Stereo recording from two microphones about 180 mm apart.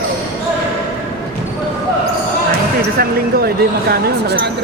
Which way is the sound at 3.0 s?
55° right (ahead or behind).